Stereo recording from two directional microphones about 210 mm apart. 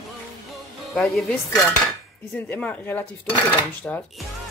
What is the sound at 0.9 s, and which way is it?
A woman's voice, 5° left (ahead or behind).